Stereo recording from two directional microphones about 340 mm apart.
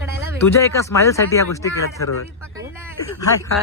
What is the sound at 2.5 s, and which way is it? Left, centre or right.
Speech, centre.